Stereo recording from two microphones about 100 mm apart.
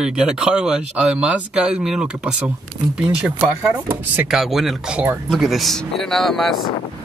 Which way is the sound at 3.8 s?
15° right (ahead or behind).